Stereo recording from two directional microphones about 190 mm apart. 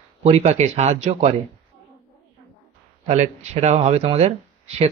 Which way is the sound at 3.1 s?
35° right (ahead or behind).